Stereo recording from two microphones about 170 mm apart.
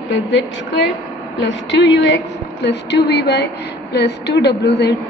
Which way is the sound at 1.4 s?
90° left.